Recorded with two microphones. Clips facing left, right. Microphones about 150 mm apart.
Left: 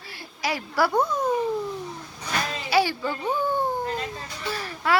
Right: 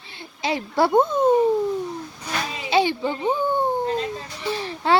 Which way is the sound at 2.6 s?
20° right (ahead or behind).